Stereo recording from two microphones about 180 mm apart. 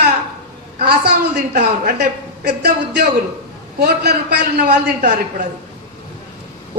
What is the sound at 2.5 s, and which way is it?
A man's voice, 65° right (ahead or behind).